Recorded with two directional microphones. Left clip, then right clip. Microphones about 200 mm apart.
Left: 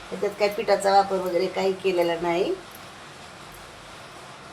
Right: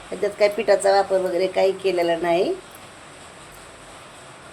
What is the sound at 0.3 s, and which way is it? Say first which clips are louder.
A woman's voice: right 5 dB; 35° right (ahead or behind).